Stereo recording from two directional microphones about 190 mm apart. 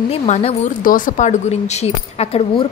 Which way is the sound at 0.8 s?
45° left (ahead or behind).